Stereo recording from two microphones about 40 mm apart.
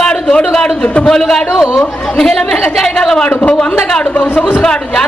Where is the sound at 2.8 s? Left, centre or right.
Centre.